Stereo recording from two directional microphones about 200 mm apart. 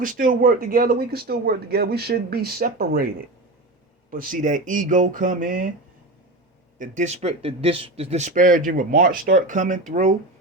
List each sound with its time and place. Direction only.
0.0 s speech: 45° right (ahead or behind)
4.1 s speech: 45° right (ahead or behind)
6.7 s speech: 40° right (ahead or behind)